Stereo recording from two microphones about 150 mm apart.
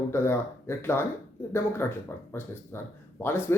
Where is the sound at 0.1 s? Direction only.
15° left (ahead or behind).